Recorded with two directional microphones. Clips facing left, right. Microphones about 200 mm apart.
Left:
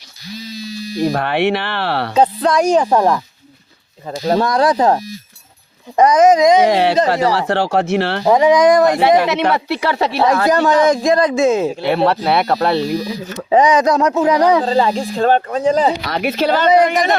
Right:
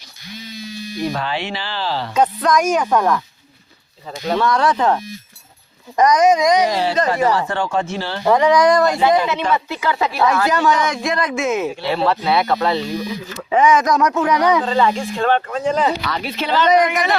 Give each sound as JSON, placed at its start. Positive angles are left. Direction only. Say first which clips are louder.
{"t": 0.3, "sound": "electric shaver", "louder": "left 4 dB", "side_deg": 35}
{"t": 1.2, "sound": "speech", "louder": "left 8 dB", "side_deg": 60}
{"t": 2.1, "sound": "speech", "louder": "left 2 dB", "side_deg": 30}
{"t": 6.0, "sound": "speech", "louder": "left 4 dB", "side_deg": 25}
{"t": 6.7, "sound": "speech", "louder": "left 6 dB", "side_deg": 65}
{"t": 7.1, "sound": "speech", "louder": "left 2 dB", "side_deg": 75}
{"t": 8.3, "sound": "speech", "louder": "left 2 dB", "side_deg": 20}
{"t": 9.0, "sound": "speech", "louder": "left 3 dB", "side_deg": 70}
{"t": 10.0, "sound": "speech", "louder": "left 2 dB", "side_deg": 35}
{"t": 16.7, "sound": "speech", "louder": "left 3 dB", "side_deg": 30}